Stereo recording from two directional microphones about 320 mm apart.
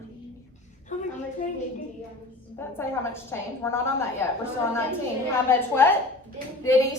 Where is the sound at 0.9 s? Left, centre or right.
Left.